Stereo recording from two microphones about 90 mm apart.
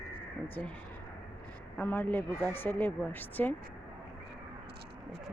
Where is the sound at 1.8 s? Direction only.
20° left (ahead or behind).